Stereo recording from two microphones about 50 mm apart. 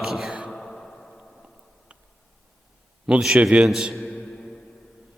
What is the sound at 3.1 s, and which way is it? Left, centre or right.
Speech, centre.